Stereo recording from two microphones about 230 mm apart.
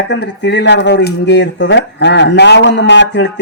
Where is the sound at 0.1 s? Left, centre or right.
Left.